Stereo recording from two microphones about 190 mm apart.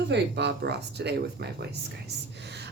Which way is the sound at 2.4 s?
65° right (ahead or behind).